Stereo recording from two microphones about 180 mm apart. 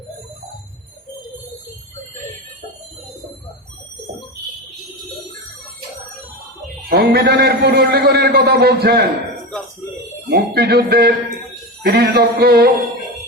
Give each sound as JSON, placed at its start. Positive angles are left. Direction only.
{"t": 6.8, "sound": "a man's voice", "side_deg": -60}
{"t": 10.2, "sound": "a man's voice", "side_deg": -60}